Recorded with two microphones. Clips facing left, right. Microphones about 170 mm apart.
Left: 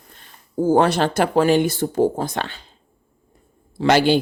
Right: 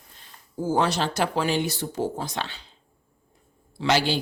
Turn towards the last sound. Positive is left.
turn(degrees=55)  # may be behind; listen again after turning